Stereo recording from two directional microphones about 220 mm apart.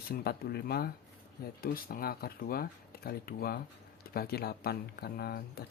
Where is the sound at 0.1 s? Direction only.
45° left (ahead or behind).